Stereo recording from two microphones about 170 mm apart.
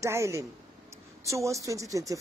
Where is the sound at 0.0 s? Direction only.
15° right (ahead or behind).